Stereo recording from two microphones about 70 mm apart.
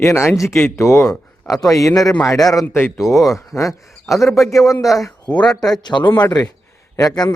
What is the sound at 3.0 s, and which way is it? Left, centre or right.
A man's voice, centre.